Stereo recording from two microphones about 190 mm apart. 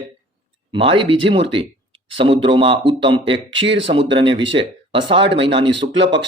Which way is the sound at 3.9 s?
25° right (ahead or behind).